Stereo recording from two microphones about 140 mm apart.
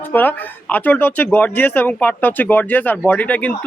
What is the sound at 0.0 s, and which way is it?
A man's voice, 15° left (ahead or behind).